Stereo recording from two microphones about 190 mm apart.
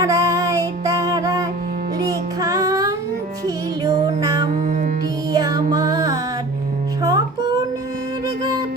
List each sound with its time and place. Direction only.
0.0 s music: 20° right (ahead or behind)
4.5 s music: 45° right (ahead or behind)
5.3 s music: 20° right (ahead or behind)